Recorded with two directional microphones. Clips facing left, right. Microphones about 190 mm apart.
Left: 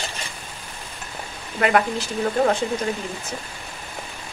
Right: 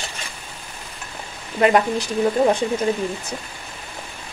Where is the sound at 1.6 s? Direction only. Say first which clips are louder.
Right 3 dB; 20° right (ahead or behind).